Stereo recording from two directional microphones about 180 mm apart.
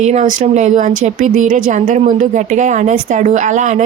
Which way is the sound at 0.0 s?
40° right (ahead or behind).